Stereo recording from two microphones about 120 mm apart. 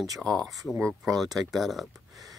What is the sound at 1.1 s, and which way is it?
Speech, centre (ahead or behind).